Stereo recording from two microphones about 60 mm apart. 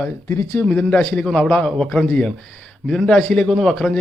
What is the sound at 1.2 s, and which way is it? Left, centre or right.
A man's voice, centre.